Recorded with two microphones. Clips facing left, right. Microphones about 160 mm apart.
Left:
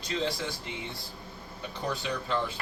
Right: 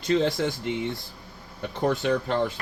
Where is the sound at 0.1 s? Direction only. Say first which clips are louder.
Right 9 dB; 55° right (ahead or behind).